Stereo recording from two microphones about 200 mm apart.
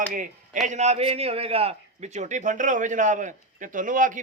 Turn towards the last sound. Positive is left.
turn(degrees=-40)  # may be behind; listen again after turning